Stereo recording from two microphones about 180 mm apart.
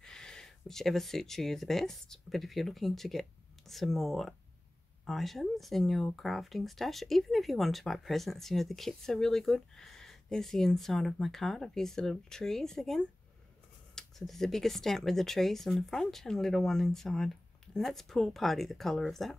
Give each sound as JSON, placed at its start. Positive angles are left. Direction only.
{"t": 0.0, "sound": "speech", "side_deg": 5}